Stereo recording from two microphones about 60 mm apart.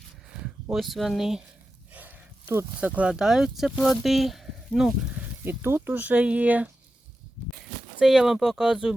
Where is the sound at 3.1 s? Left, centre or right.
Centre.